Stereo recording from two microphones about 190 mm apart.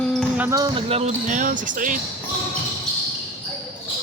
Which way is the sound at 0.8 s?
35° right (ahead or behind).